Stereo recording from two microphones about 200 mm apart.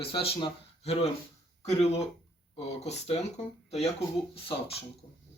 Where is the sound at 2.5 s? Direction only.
30° left (ahead or behind).